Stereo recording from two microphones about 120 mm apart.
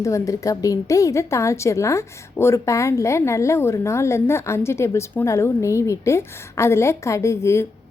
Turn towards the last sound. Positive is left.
turn(degrees=25)  # may be behind; listen again after turning